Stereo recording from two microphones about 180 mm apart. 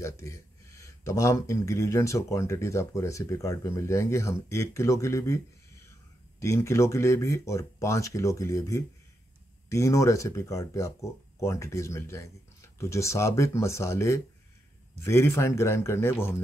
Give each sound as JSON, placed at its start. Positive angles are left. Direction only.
{"t": 0.0, "sound": "speech", "side_deg": 15}
{"t": 6.4, "sound": "speech", "side_deg": 15}